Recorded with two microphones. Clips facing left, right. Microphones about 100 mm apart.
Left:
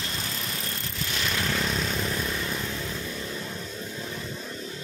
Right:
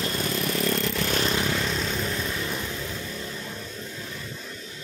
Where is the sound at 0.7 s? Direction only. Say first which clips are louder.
Right 10 dB; 90° right.